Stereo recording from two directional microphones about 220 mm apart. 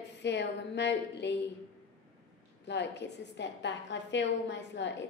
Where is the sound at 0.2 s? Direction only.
50° left (ahead or behind).